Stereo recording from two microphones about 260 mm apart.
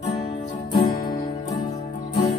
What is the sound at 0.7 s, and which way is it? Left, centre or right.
Music, centre.